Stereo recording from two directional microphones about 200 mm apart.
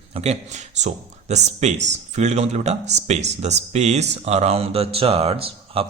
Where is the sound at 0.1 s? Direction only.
30° right (ahead or behind).